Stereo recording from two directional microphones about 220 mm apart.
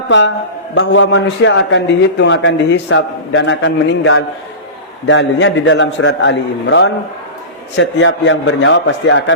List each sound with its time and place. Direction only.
0.8 s a man's voice: 55° left (ahead or behind)